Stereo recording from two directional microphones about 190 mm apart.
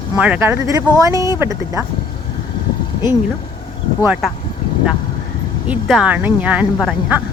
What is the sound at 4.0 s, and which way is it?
Speech, 5° right (ahead or behind).